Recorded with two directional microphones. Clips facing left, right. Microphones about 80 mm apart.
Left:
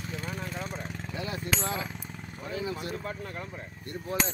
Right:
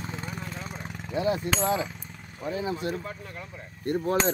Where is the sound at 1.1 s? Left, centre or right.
Right.